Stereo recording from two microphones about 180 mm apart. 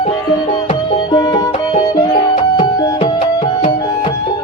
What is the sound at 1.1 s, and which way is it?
Music, 25° left (ahead or behind).